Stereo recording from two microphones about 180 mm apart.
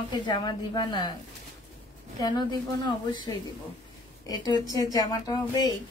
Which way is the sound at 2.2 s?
25° left (ahead or behind).